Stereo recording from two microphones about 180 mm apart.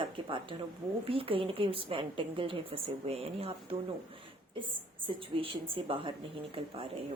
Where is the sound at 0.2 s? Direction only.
30° right (ahead or behind).